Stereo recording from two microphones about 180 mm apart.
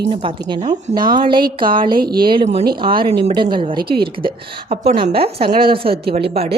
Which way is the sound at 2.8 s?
30° right (ahead or behind).